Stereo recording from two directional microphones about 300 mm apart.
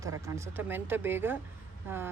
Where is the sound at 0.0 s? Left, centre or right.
Centre.